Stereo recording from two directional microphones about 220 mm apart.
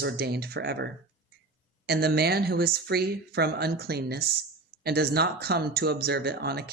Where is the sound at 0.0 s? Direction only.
45° right (ahead or behind).